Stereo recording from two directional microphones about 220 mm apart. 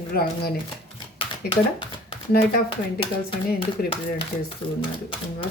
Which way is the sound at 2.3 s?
45° left (ahead or behind).